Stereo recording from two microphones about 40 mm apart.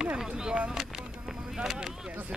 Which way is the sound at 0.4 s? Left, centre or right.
Centre.